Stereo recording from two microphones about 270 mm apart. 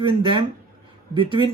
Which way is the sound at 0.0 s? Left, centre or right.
Centre.